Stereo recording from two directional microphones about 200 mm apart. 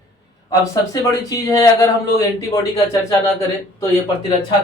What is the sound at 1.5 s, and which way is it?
Speech, 15° left (ahead or behind).